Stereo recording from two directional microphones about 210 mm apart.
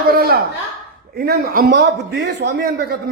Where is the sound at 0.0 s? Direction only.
45° right (ahead or behind).